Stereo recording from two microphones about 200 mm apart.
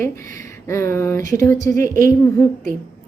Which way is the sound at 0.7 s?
15° left (ahead or behind).